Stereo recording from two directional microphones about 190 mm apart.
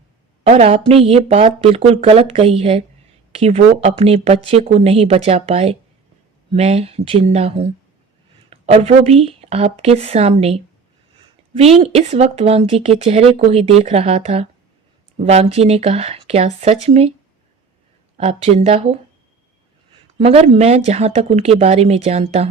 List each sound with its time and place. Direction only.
0.4 s speech: 35° right (ahead or behind)
18.2 s speech: 30° right (ahead or behind)